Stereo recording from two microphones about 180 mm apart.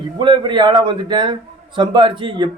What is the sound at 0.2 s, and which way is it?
A man's voice, 25° right (ahead or behind).